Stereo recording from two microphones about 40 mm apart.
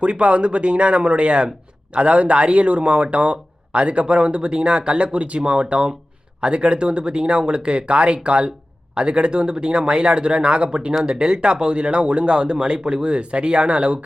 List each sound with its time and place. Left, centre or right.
0.0 s speech: right